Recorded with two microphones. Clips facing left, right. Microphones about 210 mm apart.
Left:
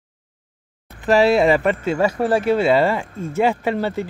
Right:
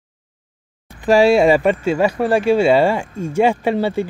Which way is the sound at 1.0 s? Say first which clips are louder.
Right 3 dB; 15° right (ahead or behind).